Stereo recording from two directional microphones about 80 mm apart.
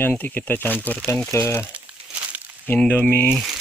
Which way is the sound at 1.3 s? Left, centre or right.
Left.